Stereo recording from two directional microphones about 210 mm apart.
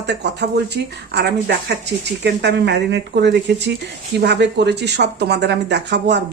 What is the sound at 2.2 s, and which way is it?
Speech, 55° right (ahead or behind).